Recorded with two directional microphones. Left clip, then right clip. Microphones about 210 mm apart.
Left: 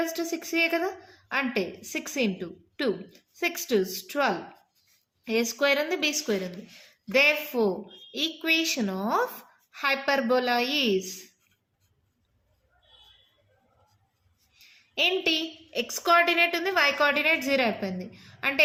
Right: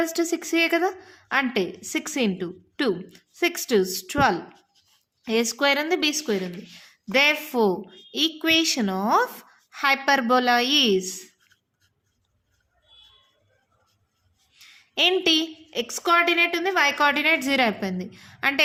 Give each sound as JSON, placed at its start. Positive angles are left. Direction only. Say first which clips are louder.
{"t": 0.0, "sound": "a woman's voice", "louder": "right 5 dB", "side_deg": -30}
{"t": 14.5, "sound": "a woman's voice", "louder": "right 4 dB", "side_deg": -35}